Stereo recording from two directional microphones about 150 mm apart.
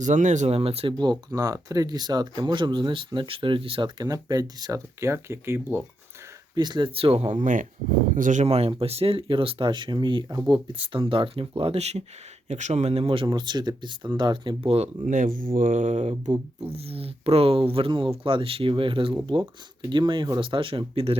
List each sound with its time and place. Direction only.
0.0 s speech: 55° right (ahead or behind)
1.3 s speech: 25° right (ahead or behind)
6.6 s speech: 30° right (ahead or behind); by 8.4 s 60° right (ahead or behind)
8.4 s speech: 40° right (ahead or behind)
15.0 s speech: 60° right (ahead or behind); by 21.2 s 40° right (ahead or behind)